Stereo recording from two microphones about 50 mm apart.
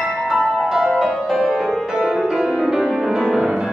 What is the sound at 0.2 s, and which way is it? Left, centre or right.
Music, centre.